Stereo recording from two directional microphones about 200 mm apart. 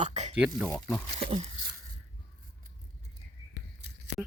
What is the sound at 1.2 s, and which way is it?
Speech, 30° right (ahead or behind).